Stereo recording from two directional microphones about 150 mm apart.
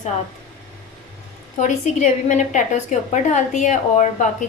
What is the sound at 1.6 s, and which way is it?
A woman's voice, 55° left (ahead or behind).